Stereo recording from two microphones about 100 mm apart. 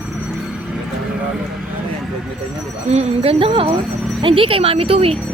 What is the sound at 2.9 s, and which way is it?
Speech, 75° right (ahead or behind).